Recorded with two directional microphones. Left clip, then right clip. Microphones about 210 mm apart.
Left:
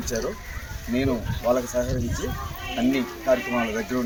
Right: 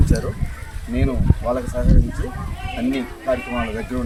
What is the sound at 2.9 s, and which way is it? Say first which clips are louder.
Speech: even; centre (ahead or behind).